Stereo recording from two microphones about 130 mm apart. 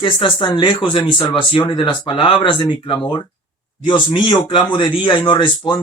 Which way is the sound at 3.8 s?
35° left (ahead or behind).